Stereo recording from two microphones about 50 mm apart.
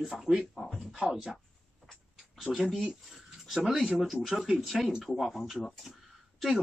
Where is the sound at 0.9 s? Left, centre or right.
Centre.